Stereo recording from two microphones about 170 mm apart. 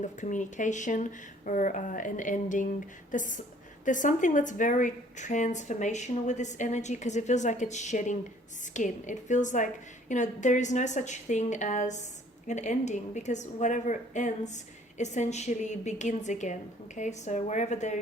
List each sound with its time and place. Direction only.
0.0 s a woman's voice: 45° left (ahead or behind)